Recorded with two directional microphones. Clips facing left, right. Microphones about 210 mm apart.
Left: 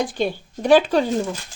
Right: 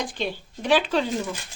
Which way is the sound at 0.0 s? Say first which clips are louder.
Left 6 dB; 45° left (ahead or behind).